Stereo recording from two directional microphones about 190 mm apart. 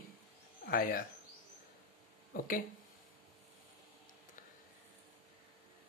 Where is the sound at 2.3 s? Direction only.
45° left (ahead or behind).